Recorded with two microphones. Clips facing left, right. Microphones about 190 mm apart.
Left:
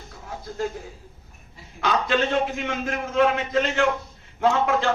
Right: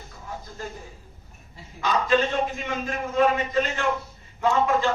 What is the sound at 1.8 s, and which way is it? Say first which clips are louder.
A man's voice: even; 70° left (ahead or behind).